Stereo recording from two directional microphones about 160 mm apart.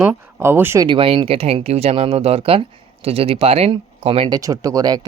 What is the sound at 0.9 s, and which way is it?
Speech, 35° right (ahead or behind).